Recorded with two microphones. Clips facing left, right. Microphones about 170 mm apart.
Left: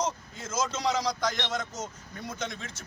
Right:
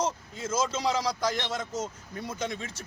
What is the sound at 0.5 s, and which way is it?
Speech, 30° right (ahead or behind).